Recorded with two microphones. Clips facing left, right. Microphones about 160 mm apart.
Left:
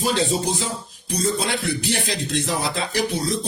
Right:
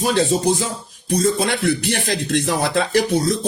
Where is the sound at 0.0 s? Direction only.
50° right (ahead or behind).